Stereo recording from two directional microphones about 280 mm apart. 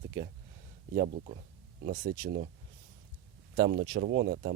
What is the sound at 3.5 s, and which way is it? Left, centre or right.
Speech, right.